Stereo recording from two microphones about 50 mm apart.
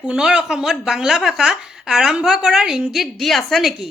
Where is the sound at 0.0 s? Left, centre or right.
Centre.